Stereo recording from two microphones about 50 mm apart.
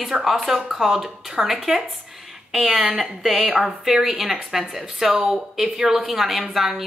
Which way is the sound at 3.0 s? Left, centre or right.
Centre.